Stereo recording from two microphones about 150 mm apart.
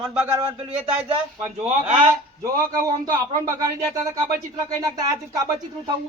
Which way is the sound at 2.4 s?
25° right (ahead or behind).